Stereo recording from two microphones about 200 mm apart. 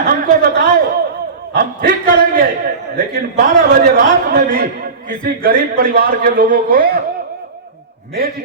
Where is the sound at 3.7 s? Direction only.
45° right (ahead or behind).